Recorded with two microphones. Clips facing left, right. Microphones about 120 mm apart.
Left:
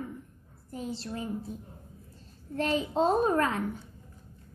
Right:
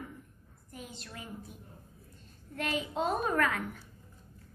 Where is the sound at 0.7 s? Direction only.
30° left (ahead or behind).